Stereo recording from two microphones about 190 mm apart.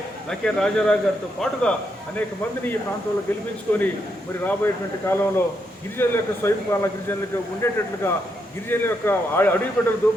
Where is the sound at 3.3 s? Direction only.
10° left (ahead or behind).